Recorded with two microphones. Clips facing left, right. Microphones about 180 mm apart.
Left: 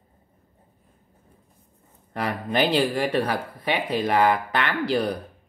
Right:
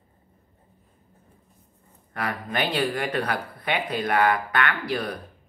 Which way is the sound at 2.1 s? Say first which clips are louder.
Left 3 dB; 25° left (ahead or behind).